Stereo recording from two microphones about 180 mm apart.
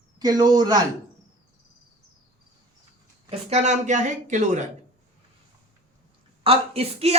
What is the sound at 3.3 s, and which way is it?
A woman's voice, 35° right (ahead or behind).